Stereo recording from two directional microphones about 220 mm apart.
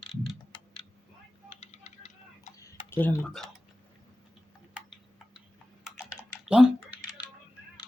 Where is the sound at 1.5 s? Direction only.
30° left (ahead or behind).